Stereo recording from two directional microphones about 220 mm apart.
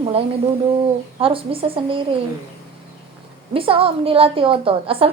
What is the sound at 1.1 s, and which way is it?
Speech, 25° right (ahead or behind).